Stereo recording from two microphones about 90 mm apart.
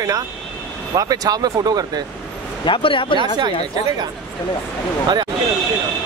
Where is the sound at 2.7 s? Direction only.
75° left (ahead or behind).